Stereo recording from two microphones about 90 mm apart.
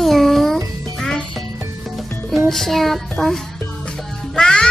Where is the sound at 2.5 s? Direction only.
5° left (ahead or behind).